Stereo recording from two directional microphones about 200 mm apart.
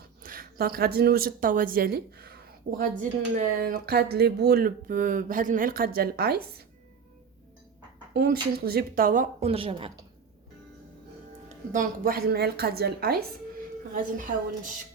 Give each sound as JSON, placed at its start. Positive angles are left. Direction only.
{"t": 0.2, "sound": "a woman's voice", "side_deg": -45}
{"t": 8.1, "sound": "speech", "side_deg": -50}
{"t": 9.5, "sound": "a woman's voice", "side_deg": -25}
{"t": 11.4, "sound": "speech", "side_deg": -40}